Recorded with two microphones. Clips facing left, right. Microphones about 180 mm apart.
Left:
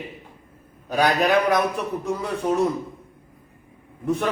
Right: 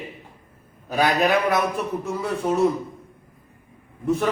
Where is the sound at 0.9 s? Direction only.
Centre (ahead or behind).